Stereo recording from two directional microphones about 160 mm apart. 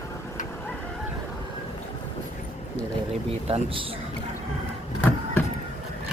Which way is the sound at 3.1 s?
40° right (ahead or behind).